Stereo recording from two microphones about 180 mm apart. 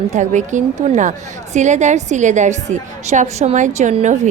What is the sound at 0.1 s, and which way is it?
A woman's voice, 40° right (ahead or behind).